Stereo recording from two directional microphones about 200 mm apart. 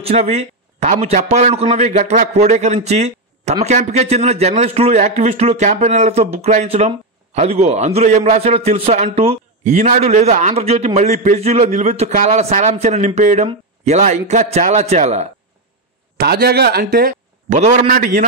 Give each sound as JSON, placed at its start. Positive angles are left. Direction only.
{"t": 0.0, "sound": "a man's voice", "side_deg": -30}
{"t": 16.2, "sound": "a man's voice", "side_deg": -50}